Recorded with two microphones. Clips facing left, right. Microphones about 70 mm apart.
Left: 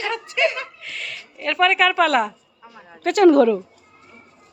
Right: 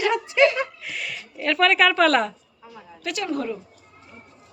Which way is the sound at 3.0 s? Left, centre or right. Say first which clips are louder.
Left 11 dB; left.